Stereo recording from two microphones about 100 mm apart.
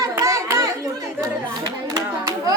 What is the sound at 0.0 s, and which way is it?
Chatter, 35° right (ahead or behind).